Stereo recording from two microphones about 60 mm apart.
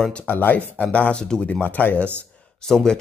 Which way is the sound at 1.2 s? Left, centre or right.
Centre.